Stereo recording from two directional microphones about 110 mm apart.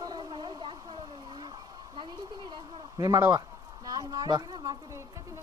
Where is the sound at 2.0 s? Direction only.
45° right (ahead or behind).